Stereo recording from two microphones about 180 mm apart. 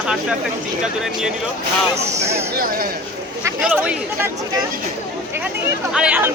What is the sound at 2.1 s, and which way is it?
Speech, 15° right (ahead or behind).